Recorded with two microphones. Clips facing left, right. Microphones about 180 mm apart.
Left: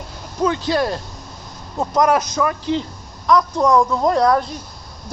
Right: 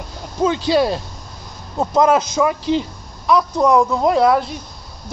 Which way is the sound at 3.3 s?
10° right (ahead or behind).